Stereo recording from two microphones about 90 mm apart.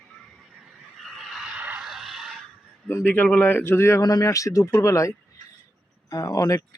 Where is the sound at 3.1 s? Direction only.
20° left (ahead or behind).